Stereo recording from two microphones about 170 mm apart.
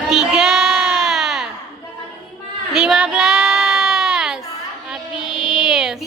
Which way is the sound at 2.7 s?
5° right (ahead or behind).